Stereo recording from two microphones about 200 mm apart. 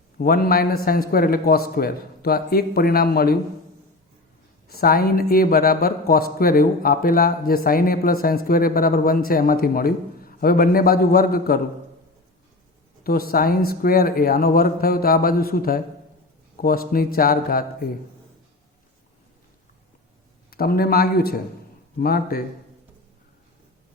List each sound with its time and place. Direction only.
0.2 s speech: 50° left (ahead or behind)
4.7 s speech: 50° left (ahead or behind)
13.0 s speech: 50° left (ahead or behind)
20.5 s speech: 50° left (ahead or behind)